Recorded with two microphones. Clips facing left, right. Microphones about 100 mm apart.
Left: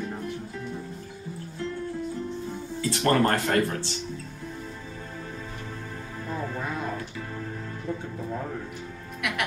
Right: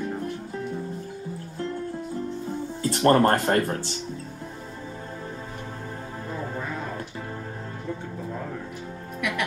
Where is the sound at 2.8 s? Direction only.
40° right (ahead or behind).